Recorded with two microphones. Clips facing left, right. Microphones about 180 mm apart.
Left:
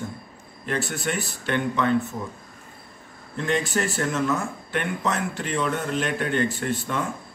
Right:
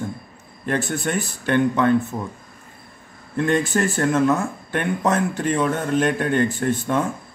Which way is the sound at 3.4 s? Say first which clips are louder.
Right 5 dB; 55° right (ahead or behind).